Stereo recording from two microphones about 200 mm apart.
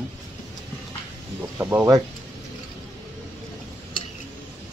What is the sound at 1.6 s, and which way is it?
Speech, 15° right (ahead or behind).